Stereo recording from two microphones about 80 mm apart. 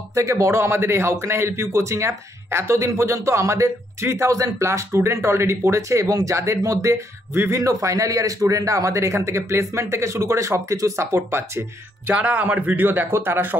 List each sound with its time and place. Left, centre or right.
0.1 s a man's voice: right
12.1 s speech: centre